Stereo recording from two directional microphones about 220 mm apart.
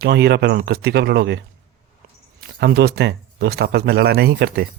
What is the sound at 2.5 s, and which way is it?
Speech, 45° right (ahead or behind).